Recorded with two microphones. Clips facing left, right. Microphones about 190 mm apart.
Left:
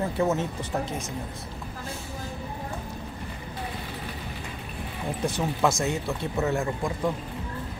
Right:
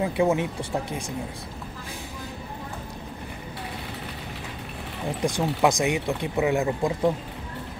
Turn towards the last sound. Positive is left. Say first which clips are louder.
# right 4 dB
turn(degrees=-20)  # may be behind; listen again after turning